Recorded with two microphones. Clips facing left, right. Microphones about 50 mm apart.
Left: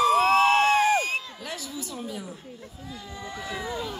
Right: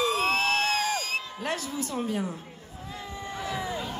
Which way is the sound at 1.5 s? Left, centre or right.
Right.